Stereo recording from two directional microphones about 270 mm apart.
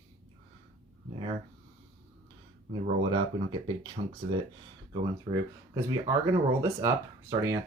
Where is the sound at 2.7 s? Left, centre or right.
Centre.